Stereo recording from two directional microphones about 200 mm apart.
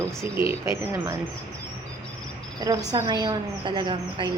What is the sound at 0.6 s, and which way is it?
Speech, 15° right (ahead or behind).